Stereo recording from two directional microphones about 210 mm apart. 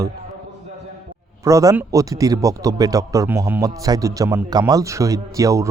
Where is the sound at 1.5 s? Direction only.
15° right (ahead or behind).